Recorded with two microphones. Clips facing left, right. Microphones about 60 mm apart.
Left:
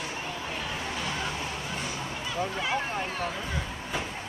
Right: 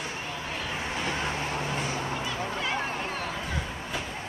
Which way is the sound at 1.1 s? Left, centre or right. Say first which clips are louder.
Right 2 dB; right.